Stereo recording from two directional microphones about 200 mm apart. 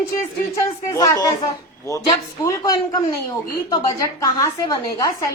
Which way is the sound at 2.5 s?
20° left (ahead or behind).